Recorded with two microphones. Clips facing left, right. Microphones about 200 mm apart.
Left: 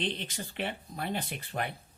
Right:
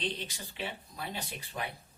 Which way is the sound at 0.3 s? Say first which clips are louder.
Left 4 dB; 55° left (ahead or behind).